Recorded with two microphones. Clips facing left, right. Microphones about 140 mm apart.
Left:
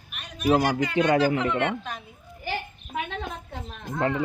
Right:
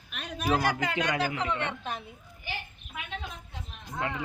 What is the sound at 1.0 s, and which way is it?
Speech, 30° left (ahead or behind).